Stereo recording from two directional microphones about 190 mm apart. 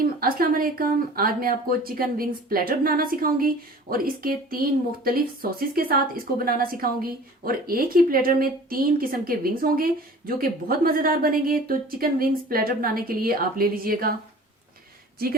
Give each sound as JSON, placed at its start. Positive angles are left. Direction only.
{"t": 0.0, "sound": "a woman's voice", "side_deg": -50}